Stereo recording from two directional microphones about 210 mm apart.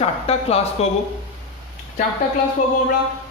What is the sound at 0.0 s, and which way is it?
Speech, 30° left (ahead or behind).